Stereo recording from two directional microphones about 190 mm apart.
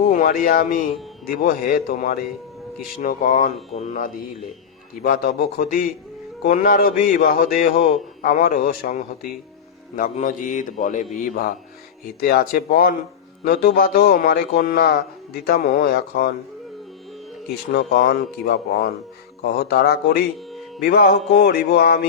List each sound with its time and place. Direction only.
0.1 s speech: 45° left (ahead or behind)
17.7 s speech: 55° left (ahead or behind)
20.5 s music: centre (ahead or behind)
20.8 s speech: 55° left (ahead or behind)